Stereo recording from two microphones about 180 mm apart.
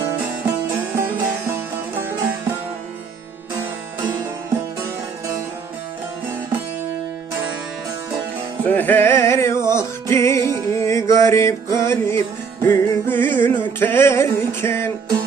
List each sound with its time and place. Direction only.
0.9 s music: 15° right (ahead or behind)
8.6 s music: 10° left (ahead or behind)